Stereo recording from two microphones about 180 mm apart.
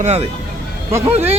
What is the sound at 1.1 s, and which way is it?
Music, 35° right (ahead or behind).